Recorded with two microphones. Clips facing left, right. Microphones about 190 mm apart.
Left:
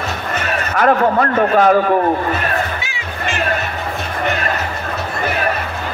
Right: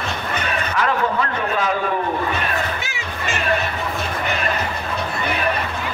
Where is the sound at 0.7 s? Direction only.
50° left (ahead or behind).